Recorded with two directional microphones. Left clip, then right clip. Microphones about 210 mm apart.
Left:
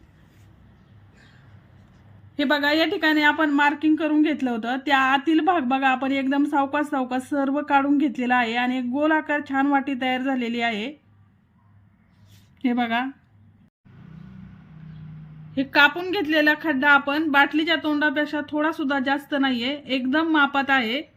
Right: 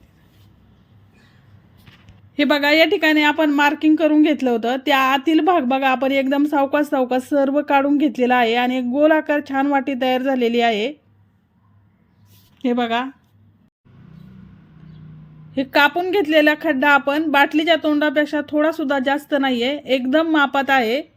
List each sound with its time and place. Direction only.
2.3 s a woman's voice: 30° right (ahead or behind)
12.6 s speech: 15° right (ahead or behind)
15.5 s a woman's voice: 25° right (ahead or behind)